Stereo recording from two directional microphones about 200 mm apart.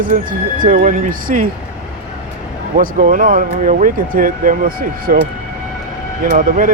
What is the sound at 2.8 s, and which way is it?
Speech, 45° right (ahead or behind).